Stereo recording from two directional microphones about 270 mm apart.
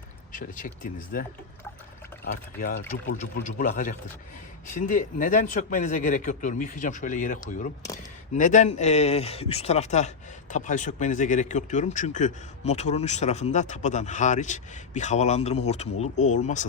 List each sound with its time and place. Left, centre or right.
0.3 s speech: left
2.2 s speech: left
8.4 s speech: left